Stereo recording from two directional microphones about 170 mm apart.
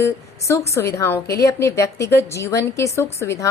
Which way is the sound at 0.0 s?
15° left (ahead or behind).